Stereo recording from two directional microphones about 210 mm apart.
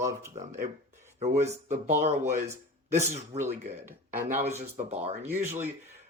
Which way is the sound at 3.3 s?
30° right (ahead or behind).